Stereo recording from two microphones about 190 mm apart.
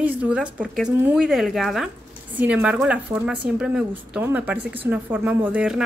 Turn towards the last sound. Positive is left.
turn(degrees=-5)  # may be behind; listen again after turning